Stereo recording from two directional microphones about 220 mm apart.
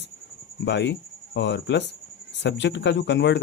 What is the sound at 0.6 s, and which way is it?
Speech, 50° left (ahead or behind).